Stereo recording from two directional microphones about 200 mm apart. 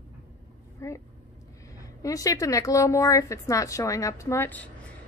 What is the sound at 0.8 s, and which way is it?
A woman's voice, 15° left (ahead or behind).